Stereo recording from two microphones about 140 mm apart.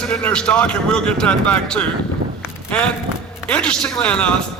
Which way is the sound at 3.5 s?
5° left (ahead or behind).